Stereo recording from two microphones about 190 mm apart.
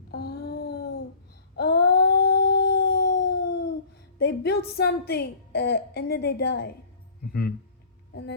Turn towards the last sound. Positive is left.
turn(degrees=55)  # may be behind; listen again after turning